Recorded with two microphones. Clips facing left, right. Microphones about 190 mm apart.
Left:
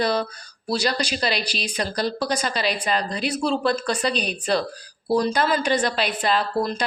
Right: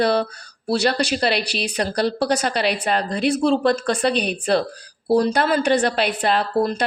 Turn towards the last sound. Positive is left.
turn(degrees=-60)  # may be behind; listen again after turning